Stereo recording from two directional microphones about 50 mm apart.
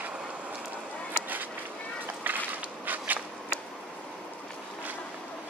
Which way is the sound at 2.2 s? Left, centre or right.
Right.